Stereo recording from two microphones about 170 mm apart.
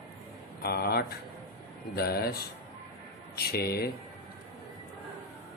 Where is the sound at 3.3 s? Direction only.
65° left (ahead or behind).